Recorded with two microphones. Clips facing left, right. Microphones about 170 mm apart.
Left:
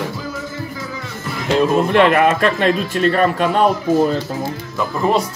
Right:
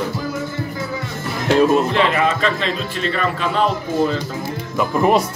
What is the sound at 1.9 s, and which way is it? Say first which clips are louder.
A man's voice: left 5 dB; 55° left (ahead or behind).